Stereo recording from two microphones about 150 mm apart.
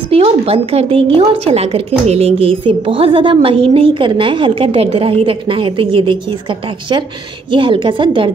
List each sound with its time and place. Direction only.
0.1 s a woman's voice: 40° right (ahead or behind)
7.5 s a woman's voice: 35° right (ahead or behind)